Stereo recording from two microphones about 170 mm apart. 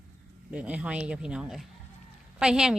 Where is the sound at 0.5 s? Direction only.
5° right (ahead or behind).